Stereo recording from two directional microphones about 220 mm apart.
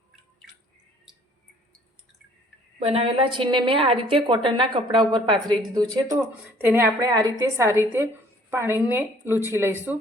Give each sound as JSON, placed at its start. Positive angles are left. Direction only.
{"t": 2.7, "sound": "a woman's voice", "side_deg": -25}